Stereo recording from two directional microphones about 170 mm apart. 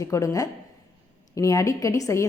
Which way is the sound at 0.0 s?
15° left (ahead or behind).